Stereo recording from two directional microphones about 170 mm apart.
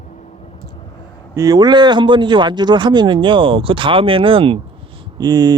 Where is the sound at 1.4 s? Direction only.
20° right (ahead or behind).